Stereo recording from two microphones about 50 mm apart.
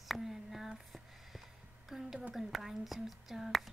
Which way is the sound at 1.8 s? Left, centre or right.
Centre.